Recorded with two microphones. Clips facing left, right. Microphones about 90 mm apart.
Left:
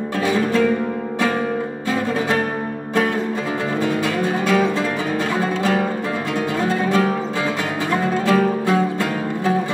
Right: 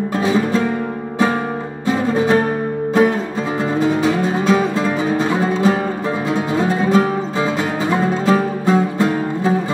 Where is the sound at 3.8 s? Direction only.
20° right (ahead or behind).